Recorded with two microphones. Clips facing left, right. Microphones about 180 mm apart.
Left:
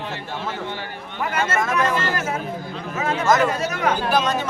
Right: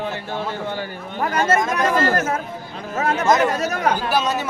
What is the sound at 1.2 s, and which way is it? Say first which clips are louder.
Speech: right 4 dB; 40° right (ahead or behind).